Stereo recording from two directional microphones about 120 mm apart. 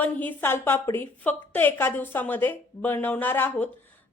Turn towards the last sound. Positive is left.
turn(degrees=15)  # may be behind; listen again after turning